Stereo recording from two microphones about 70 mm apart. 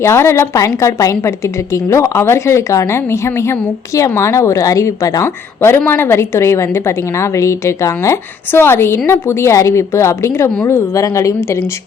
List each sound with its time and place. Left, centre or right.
0.0 s a woman's voice: left
5.2 s a woman's voice: left